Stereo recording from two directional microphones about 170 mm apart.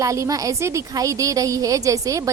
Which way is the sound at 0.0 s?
20° right (ahead or behind).